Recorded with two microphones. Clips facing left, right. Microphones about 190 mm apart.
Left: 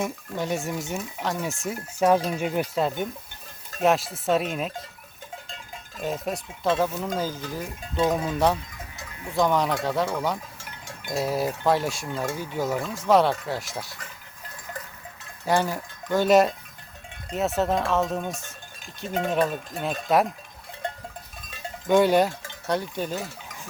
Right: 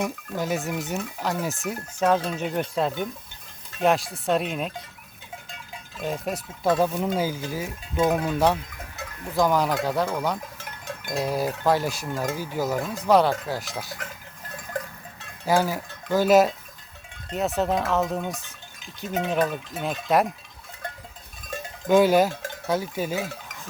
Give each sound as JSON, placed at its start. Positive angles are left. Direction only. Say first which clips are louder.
{"t": 0.0, "sound": "speech", "louder": "right 1 dB", "side_deg": 0}
{"t": 6.0, "sound": "speech", "louder": "even", "side_deg": 0}
{"t": 6.7, "sound": "cowbell", "louder": "right 2 dB", "side_deg": -15}
{"t": 9.2, "sound": "speech", "louder": "right 1 dB", "side_deg": 0}
{"t": 12.8, "sound": "cowbell", "louder": "right 1 dB", "side_deg": -20}
{"t": 13.1, "sound": "speech", "louder": "even", "side_deg": 0}
{"t": 15.4, "sound": "speech", "louder": "right 1 dB", "side_deg": 0}
{"t": 21.5, "sound": "cowbell", "louder": "right 4 dB", "side_deg": -45}
{"t": 21.8, "sound": "speech", "louder": "right 1 dB", "side_deg": 0}